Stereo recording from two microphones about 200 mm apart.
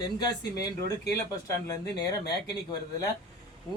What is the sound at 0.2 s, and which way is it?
Speech, 20° left (ahead or behind).